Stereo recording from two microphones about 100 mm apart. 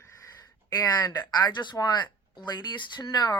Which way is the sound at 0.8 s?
40° left (ahead or behind).